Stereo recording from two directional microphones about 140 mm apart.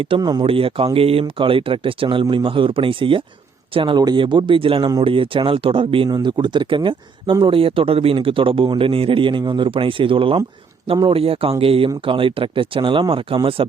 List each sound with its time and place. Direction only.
0.0 s speech: 35° right (ahead or behind)